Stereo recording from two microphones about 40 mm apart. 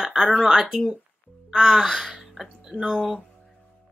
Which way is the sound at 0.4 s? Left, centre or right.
Centre.